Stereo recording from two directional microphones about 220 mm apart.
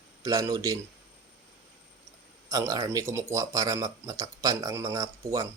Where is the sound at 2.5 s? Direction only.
15° right (ahead or behind).